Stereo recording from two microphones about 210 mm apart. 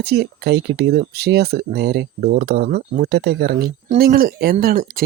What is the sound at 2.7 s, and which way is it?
Speech, 35° right (ahead or behind).